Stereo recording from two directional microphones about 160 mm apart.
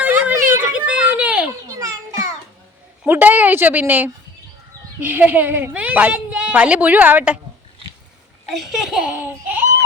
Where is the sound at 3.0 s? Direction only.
10° right (ahead or behind).